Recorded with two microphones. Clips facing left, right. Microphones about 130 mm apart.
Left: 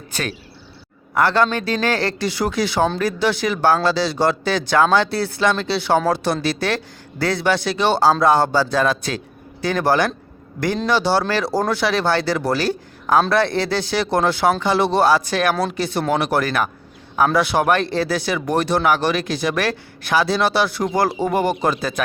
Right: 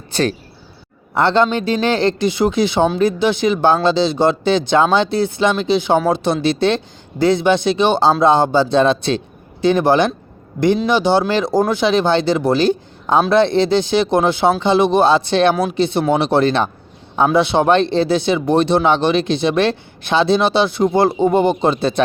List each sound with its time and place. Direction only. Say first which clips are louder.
0.1 s speech: right 9 dB; 30° right (ahead or behind)